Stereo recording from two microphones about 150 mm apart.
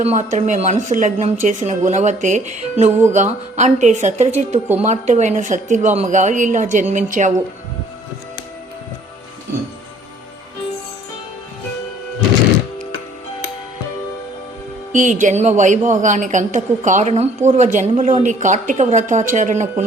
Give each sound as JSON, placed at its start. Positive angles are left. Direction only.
{"t": 0.0, "sound": "a woman's voice", "side_deg": -50}
{"t": 14.9, "sound": "a woman's voice", "side_deg": -55}